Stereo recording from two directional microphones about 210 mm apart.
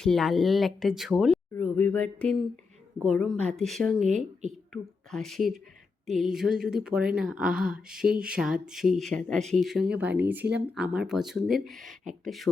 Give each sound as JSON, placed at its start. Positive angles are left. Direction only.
{"t": 0.0, "sound": "speech", "side_deg": 0}
{"t": 1.5, "sound": "a sound", "side_deg": 10}
{"t": 3.1, "sound": "speech", "side_deg": 5}
{"t": 4.0, "sound": "speech", "side_deg": -35}
{"t": 4.7, "sound": "a woman's voice", "side_deg": 0}